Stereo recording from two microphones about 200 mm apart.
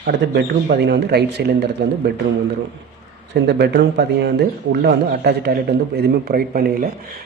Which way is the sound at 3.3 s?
55° right (ahead or behind).